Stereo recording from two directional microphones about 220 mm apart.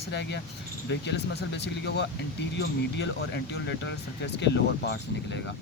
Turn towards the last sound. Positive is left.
turn(degrees=50)  # may be behind; listen again after turning